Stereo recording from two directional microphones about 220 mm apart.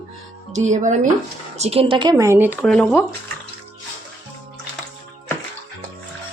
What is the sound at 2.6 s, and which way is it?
Speech, 5° left (ahead or behind).